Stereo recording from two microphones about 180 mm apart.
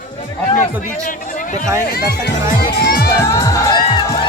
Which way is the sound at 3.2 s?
20° left (ahead or behind).